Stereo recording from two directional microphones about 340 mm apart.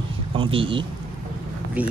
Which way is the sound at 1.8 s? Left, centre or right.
Centre.